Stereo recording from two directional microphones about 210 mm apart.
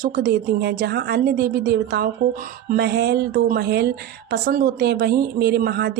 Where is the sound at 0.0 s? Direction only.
45° right (ahead or behind).